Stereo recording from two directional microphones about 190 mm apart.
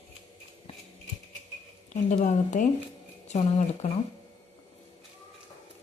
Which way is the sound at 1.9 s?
40° left (ahead or behind).